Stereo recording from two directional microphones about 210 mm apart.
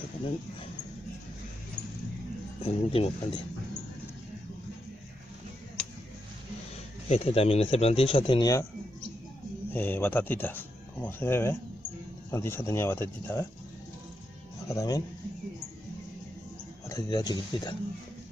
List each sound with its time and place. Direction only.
2.6 s speech: 25° left (ahead or behind)
7.1 s speech: 30° left (ahead or behind)
9.7 s speech: 10° left (ahead or behind)
14.7 s speech: 15° left (ahead or behind)
16.9 s speech: 20° left (ahead or behind)